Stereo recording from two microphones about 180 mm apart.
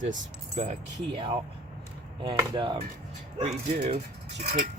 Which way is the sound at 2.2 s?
25° right (ahead or behind).